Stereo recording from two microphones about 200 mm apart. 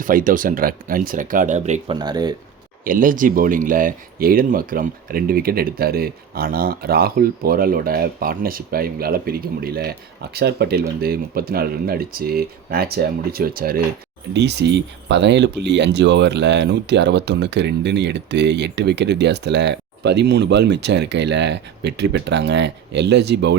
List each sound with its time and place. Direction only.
0.0 s speech: 45° right (ahead or behind)
2.0 s speech: 20° right (ahead or behind)
2.8 s speech: 45° right (ahead or behind)
14.3 s speech: 60° right (ahead or behind)